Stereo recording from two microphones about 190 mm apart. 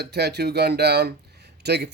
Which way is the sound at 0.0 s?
60° right (ahead or behind).